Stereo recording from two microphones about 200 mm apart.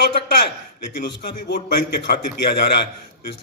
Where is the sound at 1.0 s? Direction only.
55° left (ahead or behind).